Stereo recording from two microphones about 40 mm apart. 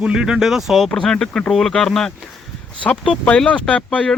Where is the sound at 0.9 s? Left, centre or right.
Centre.